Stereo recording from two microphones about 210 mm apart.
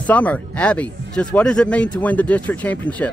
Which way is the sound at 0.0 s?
5° left (ahead or behind).